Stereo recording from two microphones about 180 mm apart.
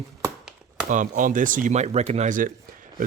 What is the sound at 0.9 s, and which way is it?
Speech, 45° right (ahead or behind).